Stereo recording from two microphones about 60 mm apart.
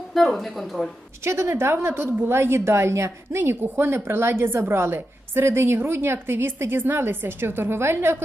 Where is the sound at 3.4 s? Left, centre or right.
Right.